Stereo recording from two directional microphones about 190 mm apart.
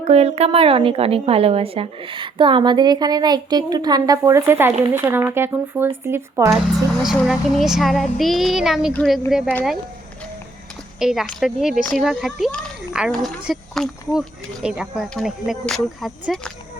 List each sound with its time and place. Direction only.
0.0 s a woman's voice: 30° right (ahead or behind); by 6.6 s 15° right (ahead or behind)
7.0 s speech: centre (ahead or behind)
11.0 s speech: centre (ahead or behind)